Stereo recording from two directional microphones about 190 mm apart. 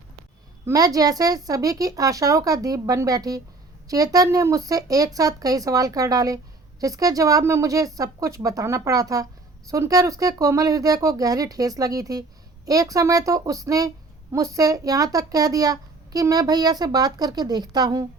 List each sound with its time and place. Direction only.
0.6 s speech: 20° right (ahead or behind)